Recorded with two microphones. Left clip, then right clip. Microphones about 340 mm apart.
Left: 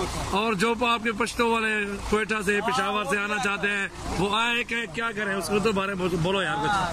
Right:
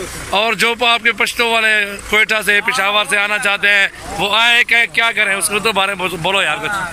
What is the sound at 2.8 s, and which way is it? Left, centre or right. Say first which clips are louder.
Speech: right 11 dB; centre.